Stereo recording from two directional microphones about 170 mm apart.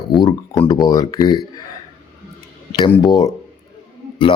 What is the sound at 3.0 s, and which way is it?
Speech, 20° left (ahead or behind).